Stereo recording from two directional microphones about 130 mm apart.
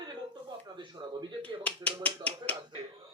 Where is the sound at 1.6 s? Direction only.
10° left (ahead or behind).